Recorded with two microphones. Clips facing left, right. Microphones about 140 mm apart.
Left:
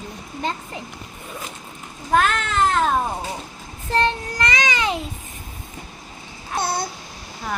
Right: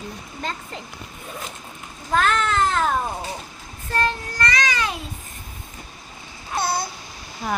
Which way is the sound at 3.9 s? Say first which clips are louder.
Left 3 dB; 20° left (ahead or behind).